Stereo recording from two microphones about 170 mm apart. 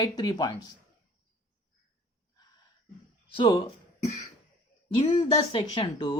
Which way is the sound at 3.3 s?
30° left (ahead or behind).